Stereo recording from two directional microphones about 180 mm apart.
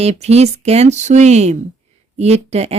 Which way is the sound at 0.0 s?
35° right (ahead or behind).